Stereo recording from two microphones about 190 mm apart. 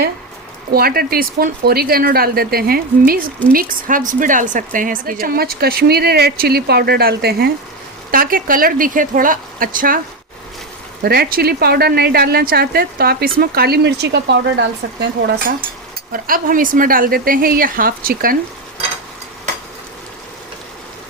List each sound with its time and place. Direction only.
0.7 s speech: 55° right (ahead or behind)
11.0 s a woman's voice: 55° right (ahead or behind)
16.1 s speech: 50° right (ahead or behind)